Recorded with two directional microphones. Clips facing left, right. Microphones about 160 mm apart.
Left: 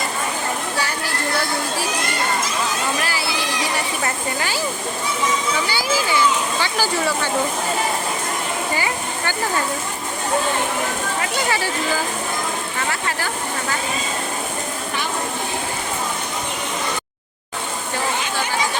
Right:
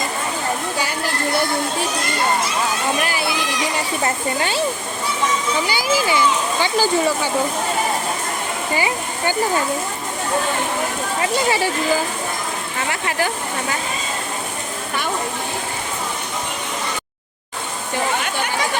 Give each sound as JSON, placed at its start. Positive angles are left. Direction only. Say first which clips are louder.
{"t": 3.0, "sound": "speech", "louder": "right 2 dB", "side_deg": -20}
{"t": 5.6, "sound": "speech", "louder": "right 2 dB", "side_deg": -15}